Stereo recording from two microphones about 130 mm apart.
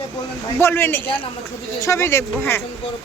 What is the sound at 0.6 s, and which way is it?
Speech, 20° left (ahead or behind).